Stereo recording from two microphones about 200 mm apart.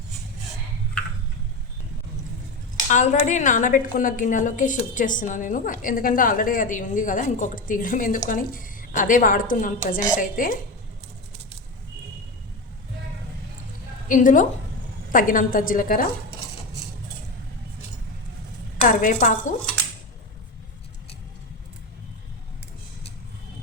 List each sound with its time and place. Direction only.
2.9 s a woman's voice: 35° left (ahead or behind)
14.1 s a woman's voice: 40° left (ahead or behind)
18.8 s a woman's voice: 35° left (ahead or behind)